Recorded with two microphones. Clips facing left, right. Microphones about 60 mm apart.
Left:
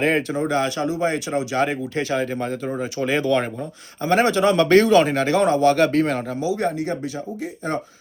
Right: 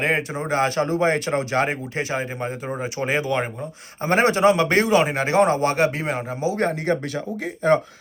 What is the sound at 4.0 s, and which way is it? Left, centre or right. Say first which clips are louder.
Speech: even; right.